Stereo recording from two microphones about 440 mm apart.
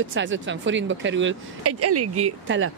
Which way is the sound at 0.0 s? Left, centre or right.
Right.